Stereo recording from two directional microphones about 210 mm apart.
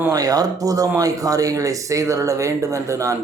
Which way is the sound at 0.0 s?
15° right (ahead or behind).